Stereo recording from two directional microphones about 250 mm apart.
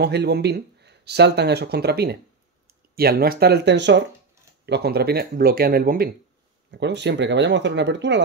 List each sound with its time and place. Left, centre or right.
0.0 s speech: right